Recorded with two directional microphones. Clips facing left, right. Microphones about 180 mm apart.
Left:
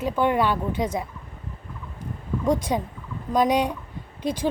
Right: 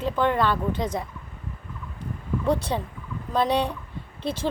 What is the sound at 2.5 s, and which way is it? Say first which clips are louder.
Speech: left 2 dB; 10° left (ahead or behind).